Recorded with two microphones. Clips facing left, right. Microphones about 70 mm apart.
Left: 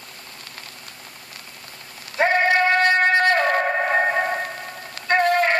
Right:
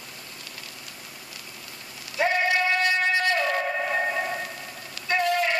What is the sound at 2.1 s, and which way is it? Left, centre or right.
Music, left.